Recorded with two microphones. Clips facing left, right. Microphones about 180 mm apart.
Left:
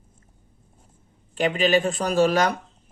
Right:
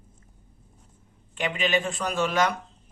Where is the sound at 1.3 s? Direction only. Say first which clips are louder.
Left 6 dB; 35° left (ahead or behind).